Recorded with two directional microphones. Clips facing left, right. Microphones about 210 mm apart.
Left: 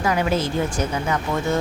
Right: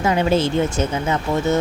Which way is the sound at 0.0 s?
25° right (ahead or behind).